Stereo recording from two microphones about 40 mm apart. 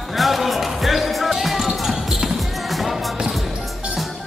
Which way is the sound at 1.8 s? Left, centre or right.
Centre.